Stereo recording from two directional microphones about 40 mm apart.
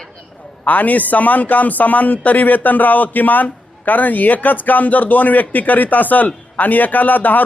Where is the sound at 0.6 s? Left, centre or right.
Left.